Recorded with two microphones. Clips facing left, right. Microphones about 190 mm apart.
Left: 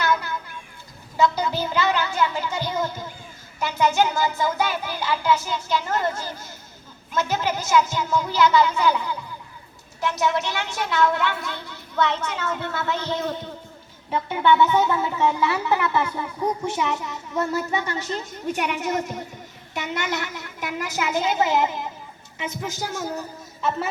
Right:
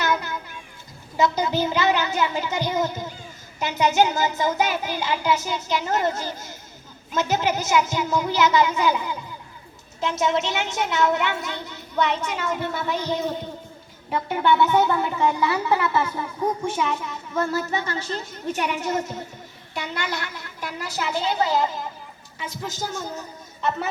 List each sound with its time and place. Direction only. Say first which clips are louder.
0.0 s children playing: left 1 dB; 20° right (ahead or behind)
1.1 s a child's voice: even; 20° right (ahead or behind)
16.6 s a woman's voice: even; 15° left (ahead or behind)